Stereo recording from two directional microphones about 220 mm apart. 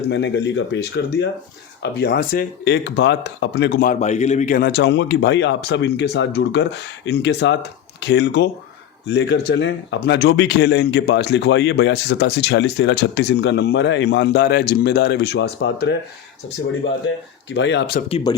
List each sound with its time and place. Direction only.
0.1 s speech: 50° left (ahead or behind)
4.0 s speech: 30° left (ahead or behind); by 16.0 s 50° left (ahead or behind)
17.5 s speech: 55° left (ahead or behind)
18.1 s speech: 20° left (ahead or behind)